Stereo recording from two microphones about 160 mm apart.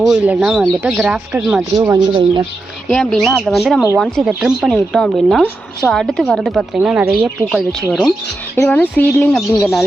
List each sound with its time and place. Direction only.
0.0 s speech: 5° right (ahead or behind)
1.7 s speech: 20° right (ahead or behind)
2.9 s speech: 5° left (ahead or behind)